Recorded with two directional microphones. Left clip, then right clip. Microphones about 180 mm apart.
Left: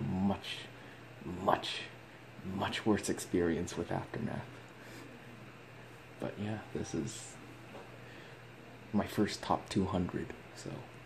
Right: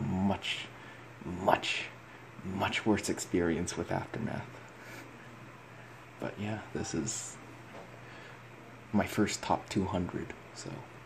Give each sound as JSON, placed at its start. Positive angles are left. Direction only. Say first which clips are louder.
{"t": 0.3, "sound": "speech", "louder": "right 5 dB", "side_deg": -15}
{"t": 6.2, "sound": "speech", "louder": "right 2 dB", "side_deg": -5}
{"t": 8.9, "sound": "speech", "louder": "right 3 dB", "side_deg": -20}